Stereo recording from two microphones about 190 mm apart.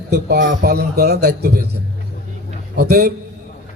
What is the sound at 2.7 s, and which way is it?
Speech, 55° right (ahead or behind).